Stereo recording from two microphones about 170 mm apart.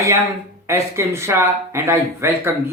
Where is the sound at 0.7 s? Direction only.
15° right (ahead or behind).